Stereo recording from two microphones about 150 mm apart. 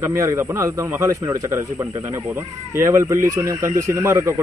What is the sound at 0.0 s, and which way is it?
Speech, 20° right (ahead or behind).